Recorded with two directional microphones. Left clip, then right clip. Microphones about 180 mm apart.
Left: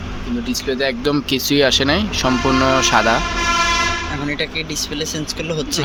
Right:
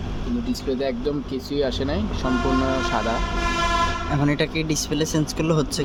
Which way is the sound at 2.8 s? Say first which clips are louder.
Left 9 dB; 20° left (ahead or behind).